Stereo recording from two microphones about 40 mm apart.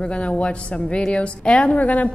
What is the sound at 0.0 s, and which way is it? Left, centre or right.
A woman's voice, left.